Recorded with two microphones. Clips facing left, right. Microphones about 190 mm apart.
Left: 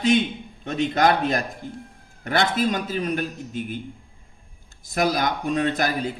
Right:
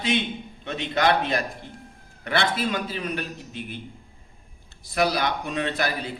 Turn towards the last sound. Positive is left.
turn(degrees=45)  # may be behind; listen again after turning